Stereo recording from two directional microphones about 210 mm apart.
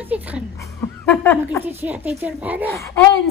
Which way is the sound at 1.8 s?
10° right (ahead or behind).